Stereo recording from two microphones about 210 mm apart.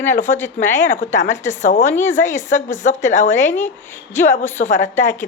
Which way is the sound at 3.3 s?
10° left (ahead or behind).